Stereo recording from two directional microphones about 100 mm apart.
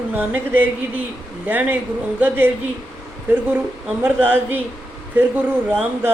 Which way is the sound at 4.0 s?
20° right (ahead or behind).